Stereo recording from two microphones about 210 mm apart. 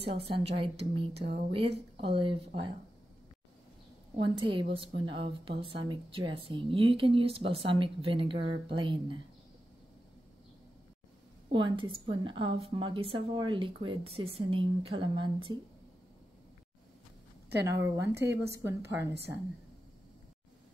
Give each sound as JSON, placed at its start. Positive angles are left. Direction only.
{"t": 0.3, "sound": "a woman's voice", "side_deg": -25}
{"t": 4.2, "sound": "a woman's voice", "side_deg": -25}
{"t": 11.4, "sound": "a woman's voice", "side_deg": -25}
{"t": 17.6, "sound": "a woman's voice", "side_deg": -15}
{"t": 18.1, "sound": "a woman's voice", "side_deg": -55}
{"t": 18.5, "sound": "a woman's voice", "side_deg": -15}